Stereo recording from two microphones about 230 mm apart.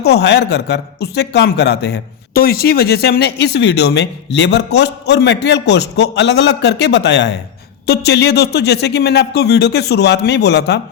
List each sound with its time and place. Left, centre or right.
0.0 s a man's voice: left